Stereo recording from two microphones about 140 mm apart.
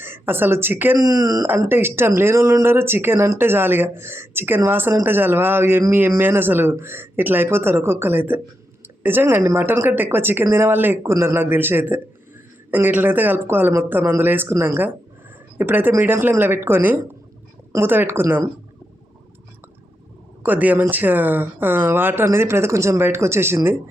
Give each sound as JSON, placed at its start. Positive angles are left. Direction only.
{"t": 0.0, "sound": "speech", "side_deg": -15}
{"t": 0.9, "sound": "speech", "side_deg": -25}
{"t": 20.4, "sound": "speech", "side_deg": -10}